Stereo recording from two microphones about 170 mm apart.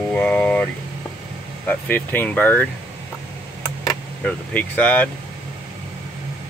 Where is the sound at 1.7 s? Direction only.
10° left (ahead or behind).